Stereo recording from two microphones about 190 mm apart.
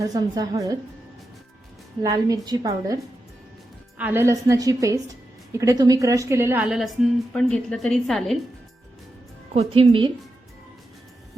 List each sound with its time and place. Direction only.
0.0 s a woman's voice: 20° right (ahead or behind)
2.0 s a woman's voice: 20° right (ahead or behind); by 8.4 s centre (ahead or behind)
9.6 s a woman's voice: 30° right (ahead or behind)